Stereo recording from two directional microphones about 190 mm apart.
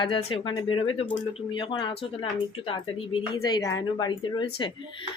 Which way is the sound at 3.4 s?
20° left (ahead or behind).